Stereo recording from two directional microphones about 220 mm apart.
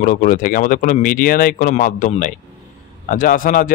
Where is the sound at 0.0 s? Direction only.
35° left (ahead or behind).